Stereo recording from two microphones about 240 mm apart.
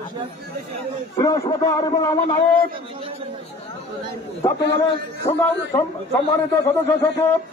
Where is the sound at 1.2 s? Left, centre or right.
Centre.